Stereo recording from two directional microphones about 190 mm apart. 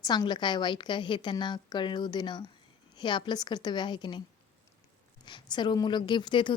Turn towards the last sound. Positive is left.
turn(degrees=25)  # may be behind; listen again after turning